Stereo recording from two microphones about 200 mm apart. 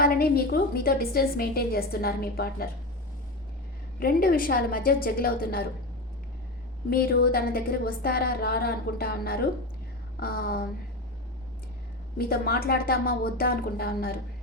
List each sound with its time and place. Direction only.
0.0 s a woman's voice: 50° left (ahead or behind)
4.0 s a woman's voice: 45° left (ahead or behind)
6.9 s a woman's voice: 50° left (ahead or behind)
12.1 s a woman's voice: 50° left (ahead or behind)